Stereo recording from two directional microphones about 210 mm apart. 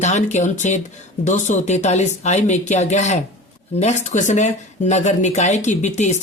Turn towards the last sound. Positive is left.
turn(degrees=35)  # may be behind; listen again after turning